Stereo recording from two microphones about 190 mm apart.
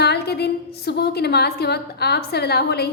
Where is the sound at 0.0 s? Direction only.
60° left (ahead or behind).